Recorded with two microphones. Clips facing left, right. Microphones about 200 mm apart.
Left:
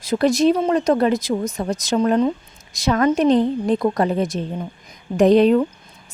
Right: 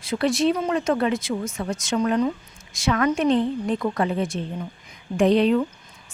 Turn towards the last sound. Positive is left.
turn(degrees=45)  # may be behind; listen again after turning